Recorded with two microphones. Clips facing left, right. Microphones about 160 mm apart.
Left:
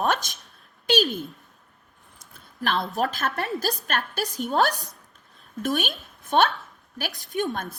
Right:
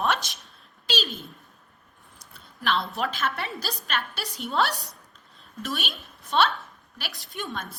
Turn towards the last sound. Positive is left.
turn(degrees=50)  # may be behind; listen again after turning